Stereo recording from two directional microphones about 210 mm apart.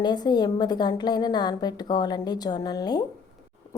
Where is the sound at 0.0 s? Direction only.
20° left (ahead or behind).